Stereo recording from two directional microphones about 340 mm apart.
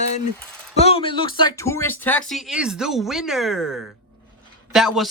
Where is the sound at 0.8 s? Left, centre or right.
Centre.